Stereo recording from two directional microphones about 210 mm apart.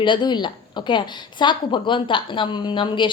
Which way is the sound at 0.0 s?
20° left (ahead or behind).